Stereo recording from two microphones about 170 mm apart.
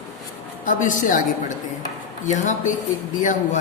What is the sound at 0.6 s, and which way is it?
Speech, 50° left (ahead or behind).